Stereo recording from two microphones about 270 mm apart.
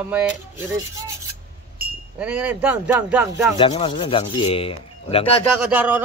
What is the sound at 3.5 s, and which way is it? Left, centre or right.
Speech, centre.